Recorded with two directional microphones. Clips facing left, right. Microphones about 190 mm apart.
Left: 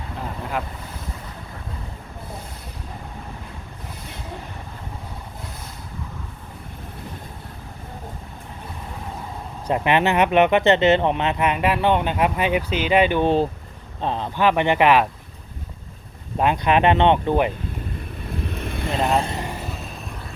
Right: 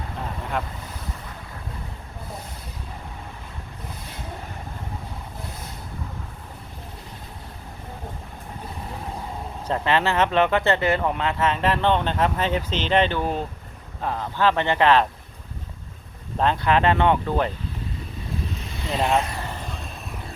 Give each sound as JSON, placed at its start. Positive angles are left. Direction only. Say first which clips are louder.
{"t": 0.2, "sound": "boat", "louder": "left 1 dB", "side_deg": 0}
{"t": 9.6, "sound": "speech", "louder": "left 3 dB", "side_deg": 15}
{"t": 13.1, "sound": "speech", "louder": "left 7 dB", "side_deg": 30}
{"t": 16.4, "sound": "speech", "louder": "left 2 dB", "side_deg": 15}
{"t": 18.4, "sound": "boat", "louder": "left 4 dB", "side_deg": 55}
{"t": 18.9, "sound": "speech", "louder": "left 1 dB", "side_deg": 0}
{"t": 19.2, "sound": "vehicle", "louder": "left 4 dB", "side_deg": 25}
{"t": 19.5, "sound": "vehicle", "louder": "left 2 dB", "side_deg": 10}